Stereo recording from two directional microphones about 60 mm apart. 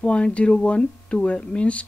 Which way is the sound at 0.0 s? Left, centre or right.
Centre.